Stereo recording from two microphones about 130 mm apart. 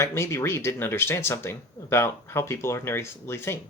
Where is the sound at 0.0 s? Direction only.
20° left (ahead or behind).